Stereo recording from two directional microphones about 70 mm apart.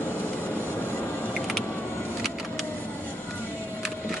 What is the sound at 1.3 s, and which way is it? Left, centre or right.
Vehicle, centre.